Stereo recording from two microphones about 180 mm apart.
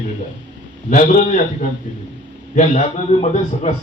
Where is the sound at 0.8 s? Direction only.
45° left (ahead or behind).